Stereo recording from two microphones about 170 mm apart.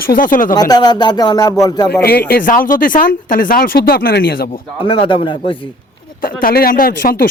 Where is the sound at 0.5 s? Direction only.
25° left (ahead or behind).